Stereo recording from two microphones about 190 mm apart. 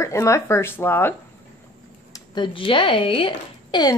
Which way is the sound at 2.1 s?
25° left (ahead or behind).